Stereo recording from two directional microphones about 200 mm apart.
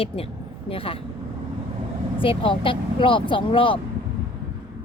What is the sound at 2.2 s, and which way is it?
A woman's voice, 25° left (ahead or behind).